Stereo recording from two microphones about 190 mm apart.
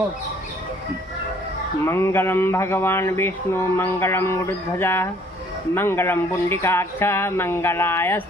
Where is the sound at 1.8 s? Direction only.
15° left (ahead or behind).